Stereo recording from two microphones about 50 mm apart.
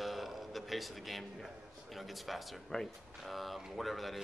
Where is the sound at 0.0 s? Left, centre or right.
Centre.